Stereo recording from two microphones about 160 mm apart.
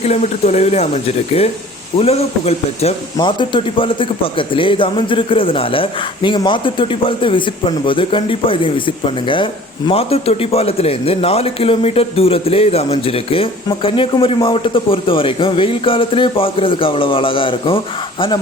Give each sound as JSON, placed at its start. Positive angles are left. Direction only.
{"t": 0.0, "sound": "a man's voice", "side_deg": 45}
{"t": 3.2, "sound": "a man's voice", "side_deg": 30}